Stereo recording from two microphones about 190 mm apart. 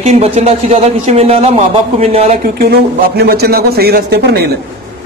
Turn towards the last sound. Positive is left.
turn(degrees=-55)  # may be behind; listen again after turning